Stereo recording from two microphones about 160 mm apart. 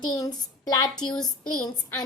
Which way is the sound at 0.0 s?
25° left (ahead or behind).